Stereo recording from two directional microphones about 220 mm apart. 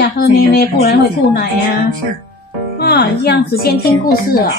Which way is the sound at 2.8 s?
45° left (ahead or behind).